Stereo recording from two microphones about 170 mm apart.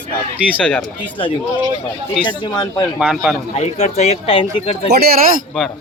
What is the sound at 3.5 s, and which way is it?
Speech, 40° left (ahead or behind).